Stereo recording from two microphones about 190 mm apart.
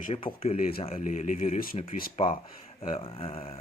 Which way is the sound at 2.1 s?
30° left (ahead or behind).